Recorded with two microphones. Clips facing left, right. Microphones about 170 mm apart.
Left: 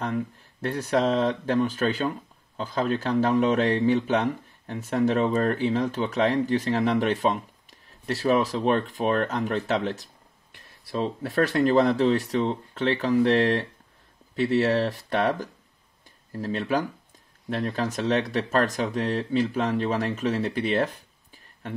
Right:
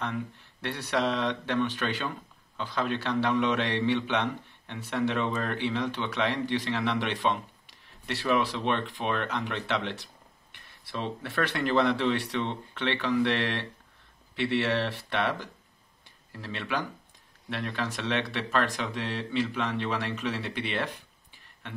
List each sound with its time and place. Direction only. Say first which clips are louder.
0.0 s speech: left 5 dB; 40° left (ahead or behind)